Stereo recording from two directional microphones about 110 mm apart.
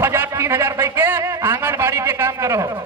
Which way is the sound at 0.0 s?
20° right (ahead or behind).